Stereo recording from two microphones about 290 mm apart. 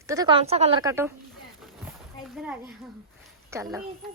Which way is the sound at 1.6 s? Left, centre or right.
Centre.